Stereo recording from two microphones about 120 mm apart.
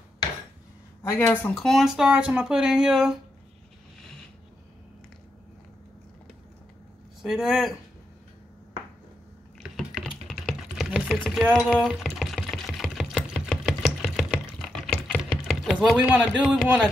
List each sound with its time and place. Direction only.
1.0 s speech: 20° left (ahead or behind)
1.5 s speech: 5° left (ahead or behind)
7.2 s speech: centre (ahead or behind)
9.6 s typing: 5° right (ahead or behind)
11.1 s a sound: centre (ahead or behind)
11.5 s sewing machine: centre (ahead or behind)
14.7 s a sound: centre (ahead or behind)
16.1 s speech: 10° right (ahead or behind)